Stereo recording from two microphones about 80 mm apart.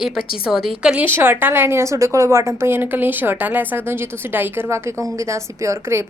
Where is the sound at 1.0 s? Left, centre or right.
Right.